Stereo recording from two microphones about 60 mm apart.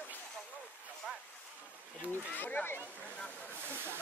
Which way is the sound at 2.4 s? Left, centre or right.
Left.